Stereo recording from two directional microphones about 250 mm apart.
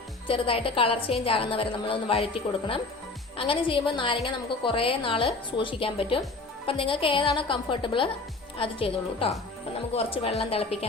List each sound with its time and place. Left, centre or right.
0.3 s a woman's voice: left